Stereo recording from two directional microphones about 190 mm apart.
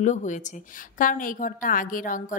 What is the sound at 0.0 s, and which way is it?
A woman's voice, 40° left (ahead or behind).